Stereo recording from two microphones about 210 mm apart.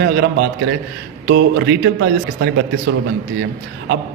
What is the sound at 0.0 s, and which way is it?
A man's voice, 50° right (ahead or behind).